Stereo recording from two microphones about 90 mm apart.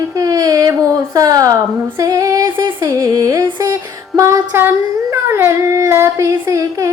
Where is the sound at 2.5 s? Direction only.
55° right (ahead or behind).